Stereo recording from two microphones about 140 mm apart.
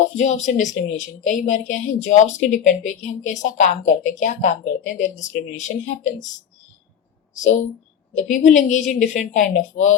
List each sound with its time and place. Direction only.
0.2 s a woman's voice: 60° left (ahead or behind)
8.1 s a woman's voice: 60° left (ahead or behind)